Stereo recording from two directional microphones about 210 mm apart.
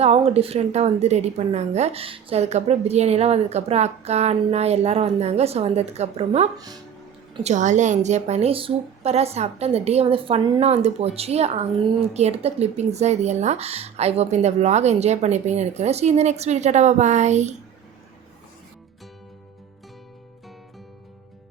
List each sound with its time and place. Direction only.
0.0 s a woman's voice: 30° right (ahead or behind)
6.6 s speech: 20° right (ahead or behind)
7.4 s a woman's voice: 35° right (ahead or behind)